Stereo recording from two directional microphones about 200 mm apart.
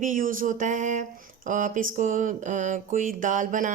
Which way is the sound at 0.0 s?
40° right (ahead or behind).